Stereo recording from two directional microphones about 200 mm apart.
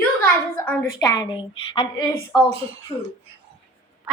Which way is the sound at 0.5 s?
10° left (ahead or behind).